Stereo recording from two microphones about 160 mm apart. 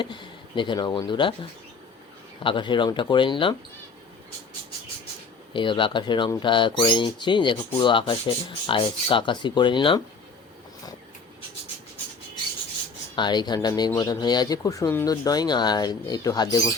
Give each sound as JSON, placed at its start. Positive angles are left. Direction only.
{"t": 0.0, "sound": "speech", "side_deg": 30}
{"t": 2.4, "sound": "speech", "side_deg": 30}
{"t": 5.5, "sound": "speech", "side_deg": 30}
{"t": 13.1, "sound": "speech", "side_deg": 30}